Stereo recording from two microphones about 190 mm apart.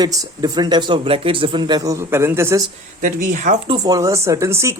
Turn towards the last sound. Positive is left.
turn(degrees=-15)  # may be behind; listen again after turning